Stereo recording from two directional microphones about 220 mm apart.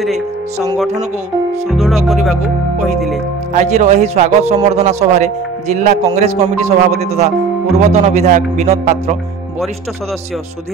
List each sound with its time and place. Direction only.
1.7 s speech: centre (ahead or behind)
3.5 s speech: 30° right (ahead or behind)